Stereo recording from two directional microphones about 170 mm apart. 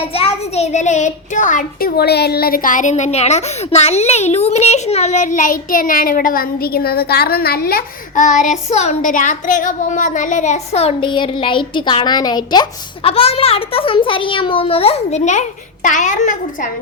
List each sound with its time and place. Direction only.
0.1 s a child's voice: 35° left (ahead or behind)
2.0 s a child's voice: 70° left (ahead or behind); by 16.4 s 50° left (ahead or behind)